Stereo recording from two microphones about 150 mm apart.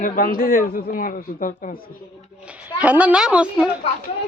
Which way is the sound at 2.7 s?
10° right (ahead or behind).